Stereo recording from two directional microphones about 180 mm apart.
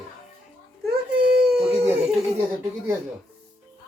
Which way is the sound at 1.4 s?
5° right (ahead or behind).